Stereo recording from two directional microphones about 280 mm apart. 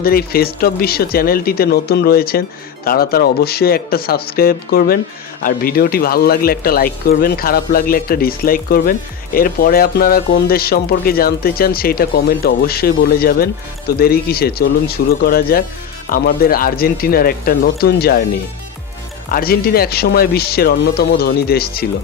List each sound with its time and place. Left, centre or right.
0.0 s speech: left
19.3 s speech: left